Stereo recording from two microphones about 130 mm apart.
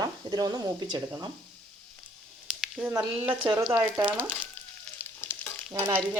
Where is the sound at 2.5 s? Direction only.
5° right (ahead or behind).